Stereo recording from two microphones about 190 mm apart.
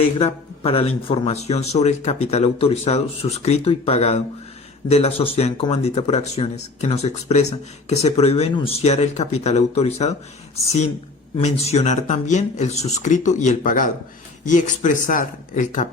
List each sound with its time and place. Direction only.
0.2 s speech: 30° left (ahead or behind)